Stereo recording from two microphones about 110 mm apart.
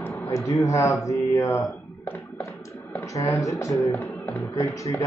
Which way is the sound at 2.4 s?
30° left (ahead or behind).